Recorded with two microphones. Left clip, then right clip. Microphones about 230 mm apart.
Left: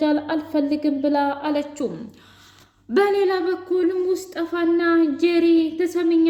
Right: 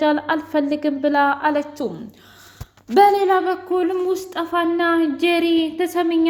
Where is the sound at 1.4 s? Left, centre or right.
Right.